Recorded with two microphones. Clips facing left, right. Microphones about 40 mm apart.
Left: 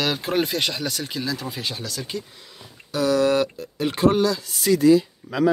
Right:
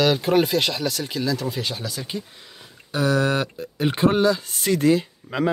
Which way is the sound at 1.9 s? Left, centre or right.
Centre.